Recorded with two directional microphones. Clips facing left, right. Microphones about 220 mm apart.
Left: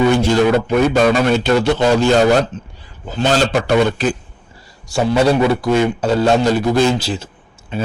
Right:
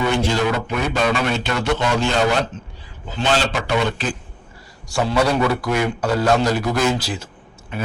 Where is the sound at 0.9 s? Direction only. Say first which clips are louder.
Left 7 dB; 40° left (ahead or behind).